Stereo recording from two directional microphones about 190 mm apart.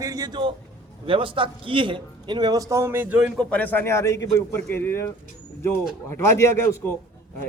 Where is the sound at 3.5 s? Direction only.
10° left (ahead or behind).